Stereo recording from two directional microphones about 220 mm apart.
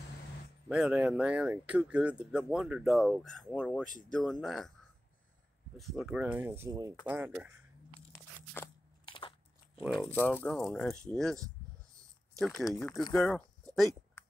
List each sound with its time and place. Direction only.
0.7 s speech: 5° right (ahead or behind)
5.8 s speech: centre (ahead or behind)
9.0 s biting: 20° left (ahead or behind)
9.9 s speech: 10° left (ahead or behind)
12.4 s speech: centre (ahead or behind)